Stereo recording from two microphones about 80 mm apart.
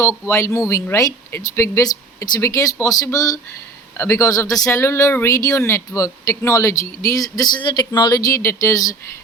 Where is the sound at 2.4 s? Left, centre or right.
Left.